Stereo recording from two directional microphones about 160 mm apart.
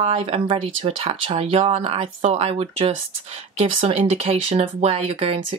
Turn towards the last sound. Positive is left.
turn(degrees=-40)  # may be behind; listen again after turning